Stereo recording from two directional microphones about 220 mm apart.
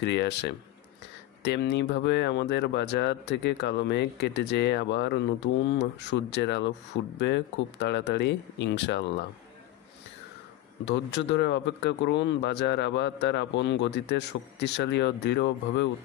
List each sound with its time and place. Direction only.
0.0 s speech: 50° left (ahead or behind)
10.9 s speech: 55° left (ahead or behind)